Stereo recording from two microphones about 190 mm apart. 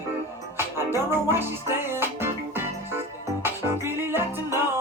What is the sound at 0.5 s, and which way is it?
Music, 15° right (ahead or behind).